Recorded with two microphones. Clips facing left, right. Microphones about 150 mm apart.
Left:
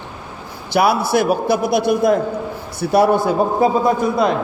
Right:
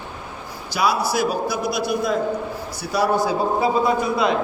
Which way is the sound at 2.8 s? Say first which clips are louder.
Left 6 dB; 55° left (ahead or behind).